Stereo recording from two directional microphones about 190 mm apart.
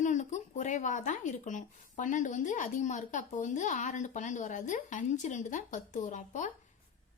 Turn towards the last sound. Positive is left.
turn(degrees=40)  # may be behind; listen again after turning